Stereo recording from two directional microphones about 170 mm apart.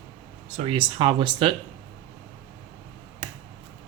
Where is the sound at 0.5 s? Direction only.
35° right (ahead or behind).